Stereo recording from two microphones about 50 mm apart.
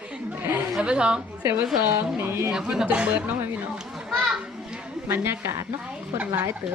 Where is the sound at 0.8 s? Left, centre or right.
Centre.